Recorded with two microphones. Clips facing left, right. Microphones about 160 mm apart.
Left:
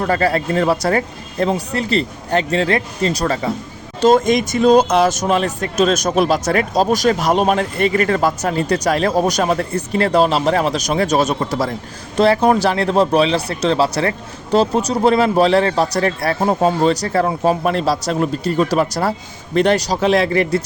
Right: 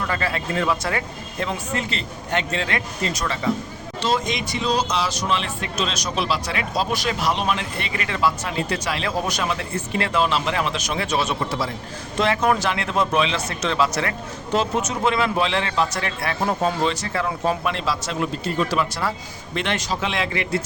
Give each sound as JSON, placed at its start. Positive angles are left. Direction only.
{"t": 0.0, "sound": "speech", "side_deg": 40}